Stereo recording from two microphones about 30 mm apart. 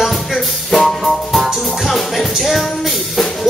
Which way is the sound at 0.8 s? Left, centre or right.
Centre.